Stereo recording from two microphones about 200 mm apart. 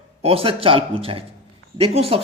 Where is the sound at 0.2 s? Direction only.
30° right (ahead or behind).